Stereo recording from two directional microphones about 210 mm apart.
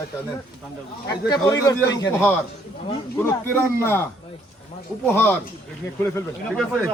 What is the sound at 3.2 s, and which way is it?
Speech, 10° left (ahead or behind).